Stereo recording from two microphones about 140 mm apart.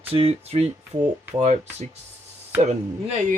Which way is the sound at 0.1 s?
45° right (ahead or behind).